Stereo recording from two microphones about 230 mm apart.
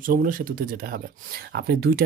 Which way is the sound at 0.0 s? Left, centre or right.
Right.